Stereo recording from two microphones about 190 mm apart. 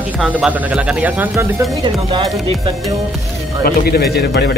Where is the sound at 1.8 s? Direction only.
25° right (ahead or behind).